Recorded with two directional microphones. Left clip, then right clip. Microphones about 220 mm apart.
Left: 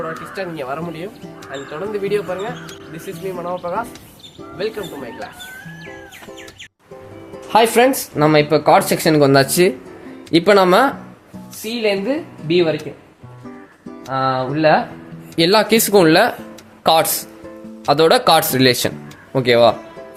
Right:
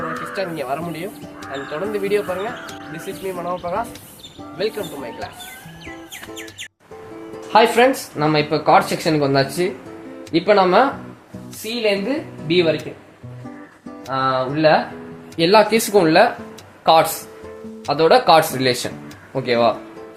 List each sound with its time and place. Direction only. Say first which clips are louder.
0.1 s speech: right 2 dB; centre (ahead or behind)
7.5 s speech: left 1 dB; 50° left (ahead or behind)
11.6 s speech: left 1 dB; 30° left (ahead or behind)
14.1 s speech: left 1 dB; 30° left (ahead or behind)
15.4 s speech: even; 45° left (ahead or behind)